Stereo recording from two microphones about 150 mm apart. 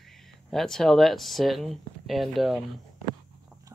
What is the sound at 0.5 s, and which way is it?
Speech, 5° left (ahead or behind).